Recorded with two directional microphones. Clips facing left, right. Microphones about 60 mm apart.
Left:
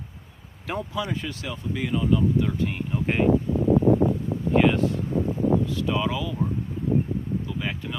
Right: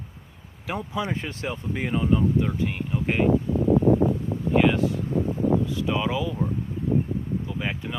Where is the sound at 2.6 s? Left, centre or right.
Centre.